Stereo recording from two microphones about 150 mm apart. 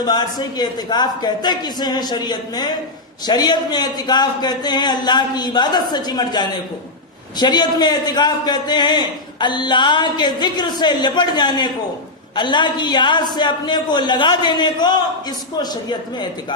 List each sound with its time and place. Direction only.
0.0 s a man's voice: 25° left (ahead or behind)